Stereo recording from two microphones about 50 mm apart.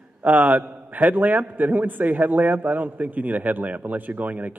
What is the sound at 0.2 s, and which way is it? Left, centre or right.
A man's voice, right.